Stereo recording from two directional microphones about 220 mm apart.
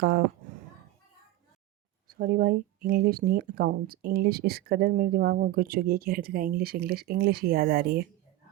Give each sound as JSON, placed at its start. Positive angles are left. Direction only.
{"t": 2.0, "sound": "speech", "side_deg": -40}